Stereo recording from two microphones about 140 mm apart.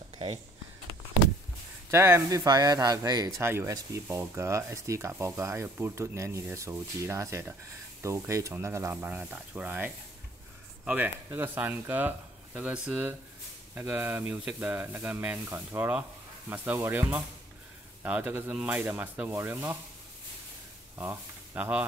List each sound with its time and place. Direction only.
1.9 s speech: 20° right (ahead or behind)
11.2 s speech: 15° right (ahead or behind)
21.0 s speech: 15° right (ahead or behind)